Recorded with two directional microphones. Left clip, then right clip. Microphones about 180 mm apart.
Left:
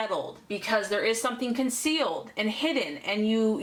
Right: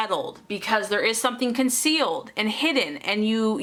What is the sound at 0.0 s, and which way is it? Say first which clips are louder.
A woman's voice: right 4 dB; 25° right (ahead or behind).